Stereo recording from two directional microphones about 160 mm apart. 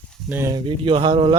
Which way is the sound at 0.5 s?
35° right (ahead or behind).